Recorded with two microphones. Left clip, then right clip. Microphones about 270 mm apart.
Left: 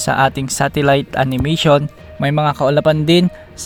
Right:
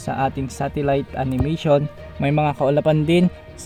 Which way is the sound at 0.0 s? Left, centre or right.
Left.